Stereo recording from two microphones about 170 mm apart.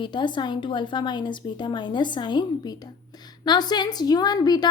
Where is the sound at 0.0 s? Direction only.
25° left (ahead or behind).